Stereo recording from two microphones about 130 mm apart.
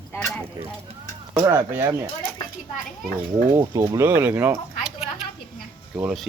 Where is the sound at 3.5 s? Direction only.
20° right (ahead or behind).